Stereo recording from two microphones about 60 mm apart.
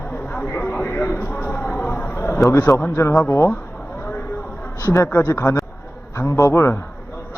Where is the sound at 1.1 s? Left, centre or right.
Left.